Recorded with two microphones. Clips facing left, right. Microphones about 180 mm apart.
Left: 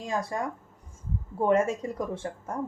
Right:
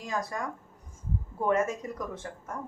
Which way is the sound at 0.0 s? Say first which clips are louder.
Left 3 dB; 25° left (ahead or behind).